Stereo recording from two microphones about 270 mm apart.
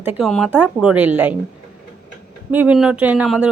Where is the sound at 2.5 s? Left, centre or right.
Centre.